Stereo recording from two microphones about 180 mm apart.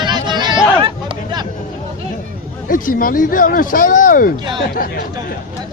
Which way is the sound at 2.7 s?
50° left (ahead or behind).